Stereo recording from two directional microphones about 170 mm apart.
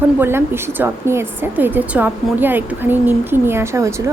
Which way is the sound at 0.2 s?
15° right (ahead or behind).